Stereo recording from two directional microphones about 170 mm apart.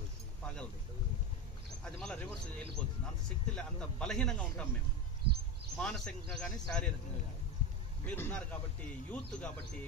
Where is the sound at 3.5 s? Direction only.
5° left (ahead or behind).